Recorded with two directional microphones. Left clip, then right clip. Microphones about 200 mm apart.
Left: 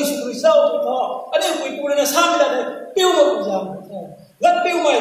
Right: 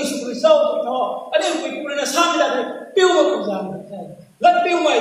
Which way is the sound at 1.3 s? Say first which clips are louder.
Even; 45° left (ahead or behind).